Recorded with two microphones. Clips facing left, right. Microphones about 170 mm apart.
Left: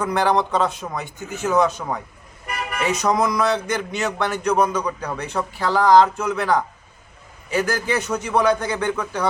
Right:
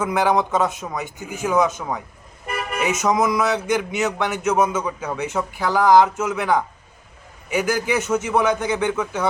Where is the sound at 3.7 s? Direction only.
15° right (ahead or behind).